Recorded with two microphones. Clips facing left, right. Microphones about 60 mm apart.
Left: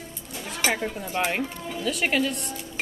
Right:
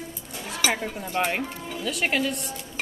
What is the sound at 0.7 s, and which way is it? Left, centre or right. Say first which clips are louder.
Speech: even; centre.